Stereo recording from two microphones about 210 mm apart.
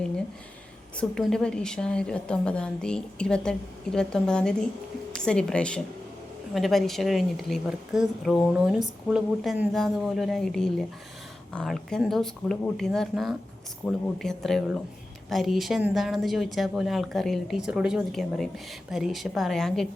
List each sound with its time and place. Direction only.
0.9 s a woman's voice: centre (ahead or behind)